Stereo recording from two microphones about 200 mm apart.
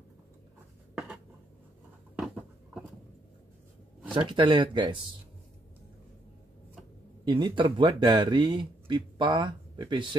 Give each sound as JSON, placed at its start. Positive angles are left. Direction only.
{"t": 0.9, "sound": "a sound", "side_deg": -5}
{"t": 4.1, "sound": "speech", "side_deg": -25}
{"t": 7.2, "sound": "speech", "side_deg": -25}